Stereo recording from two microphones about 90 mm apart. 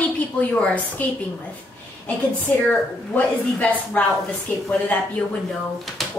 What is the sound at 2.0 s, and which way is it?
A woman's voice, 15° left (ahead or behind).